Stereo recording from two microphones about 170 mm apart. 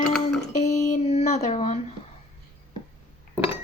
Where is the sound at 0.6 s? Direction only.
40° left (ahead or behind).